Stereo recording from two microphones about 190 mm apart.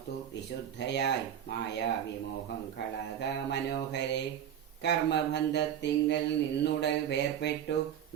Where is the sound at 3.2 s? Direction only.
65° left (ahead or behind).